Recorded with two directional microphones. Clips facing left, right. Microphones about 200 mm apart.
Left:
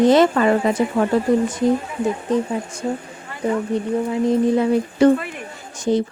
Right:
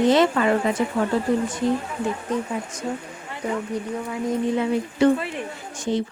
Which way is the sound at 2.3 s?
30° left (ahead or behind).